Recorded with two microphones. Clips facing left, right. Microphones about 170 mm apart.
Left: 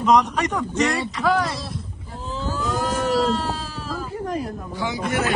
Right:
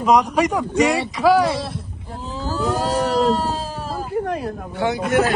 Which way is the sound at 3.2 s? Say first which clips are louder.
Right 3 dB; 40° right (ahead or behind).